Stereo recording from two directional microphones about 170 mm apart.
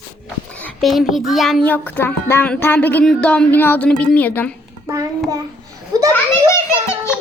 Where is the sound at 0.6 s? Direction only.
Centre (ahead or behind).